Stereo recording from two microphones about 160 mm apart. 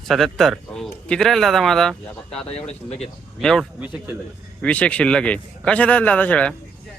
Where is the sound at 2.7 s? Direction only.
40° left (ahead or behind).